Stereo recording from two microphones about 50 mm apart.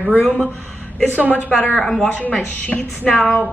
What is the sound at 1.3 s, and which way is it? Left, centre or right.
Speech, left.